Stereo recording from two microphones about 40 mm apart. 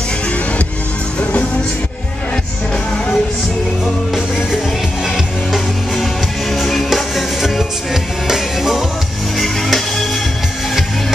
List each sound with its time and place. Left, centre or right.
5.0 s music: centre
9.4 s music: centre